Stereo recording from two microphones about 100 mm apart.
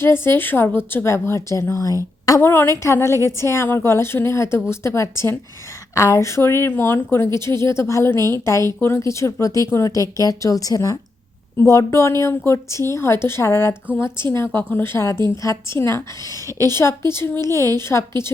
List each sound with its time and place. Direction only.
0.0 s a woman's voice: 25° left (ahead or behind)
2.4 s a woman's voice: 25° left (ahead or behind)